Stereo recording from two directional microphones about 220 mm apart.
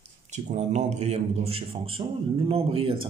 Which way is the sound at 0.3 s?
30° right (ahead or behind).